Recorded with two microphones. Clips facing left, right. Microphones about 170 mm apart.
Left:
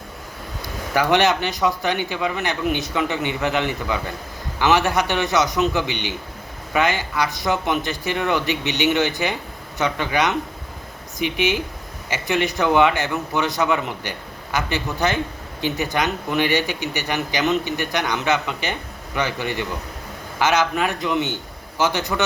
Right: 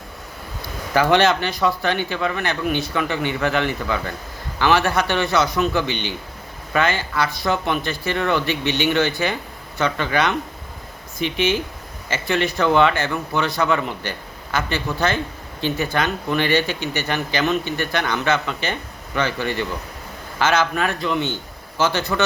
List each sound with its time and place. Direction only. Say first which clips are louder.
0.9 s speech: right 1 dB; 15° left (ahead or behind)